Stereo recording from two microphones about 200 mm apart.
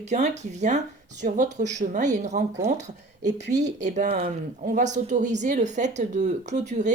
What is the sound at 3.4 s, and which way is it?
Speech, 60° right (ahead or behind).